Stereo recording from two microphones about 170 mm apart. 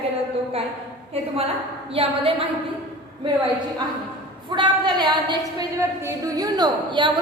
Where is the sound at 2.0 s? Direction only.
35° right (ahead or behind).